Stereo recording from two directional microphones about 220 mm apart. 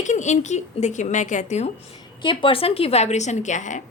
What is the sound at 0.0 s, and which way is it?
A woman's voice, 35° left (ahead or behind).